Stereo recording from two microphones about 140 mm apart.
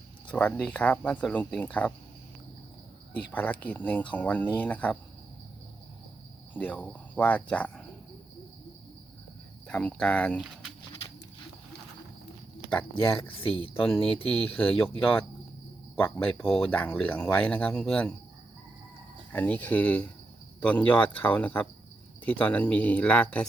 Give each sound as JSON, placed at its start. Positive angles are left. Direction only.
{"t": 0.3, "sound": "speech", "side_deg": 10}
{"t": 3.2, "sound": "speech", "side_deg": 10}
{"t": 6.5, "sound": "speech", "side_deg": 10}
{"t": 9.6, "sound": "speech", "side_deg": 10}
{"t": 10.3, "sound": "speech", "side_deg": -5}
{"t": 14.0, "sound": "speech", "side_deg": 40}
{"t": 14.4, "sound": "speech", "side_deg": 10}
{"t": 19.3, "sound": "speech", "side_deg": 10}